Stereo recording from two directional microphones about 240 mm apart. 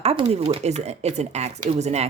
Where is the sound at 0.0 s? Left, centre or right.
Right.